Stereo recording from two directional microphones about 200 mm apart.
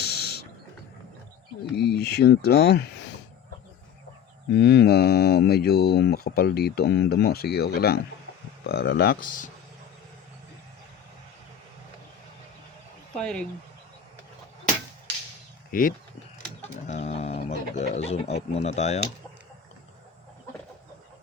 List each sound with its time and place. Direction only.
0.0 s a sound: 50° left (ahead or behind)
1.7 s speech: 50° left (ahead or behind)
4.5 s speech: 55° left (ahead or behind)
13.1 s speech: 5° left (ahead or behind)
15.7 s speech: 45° left (ahead or behind)